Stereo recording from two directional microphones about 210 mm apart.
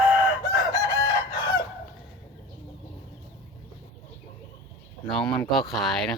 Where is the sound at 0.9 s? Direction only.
15° left (ahead or behind).